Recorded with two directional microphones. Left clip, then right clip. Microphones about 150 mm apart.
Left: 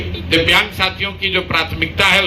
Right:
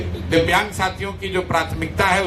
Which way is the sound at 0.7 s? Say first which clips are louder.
Left 5 dB; 45° right (ahead or behind).